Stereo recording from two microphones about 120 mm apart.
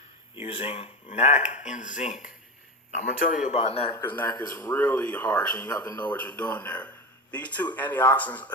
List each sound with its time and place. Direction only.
0.4 s speech: 55° left (ahead or behind)
1.0 s speech: 70° left (ahead or behind); by 3.6 s 90° left
3.6 s a man's voice: 55° left (ahead or behind)
4.0 s speech: 15° left (ahead or behind)
5.7 s speech: 30° left (ahead or behind)
6.0 s speech: 15° left (ahead or behind)